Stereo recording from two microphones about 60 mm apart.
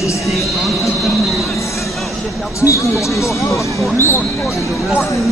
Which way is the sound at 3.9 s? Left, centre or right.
Left.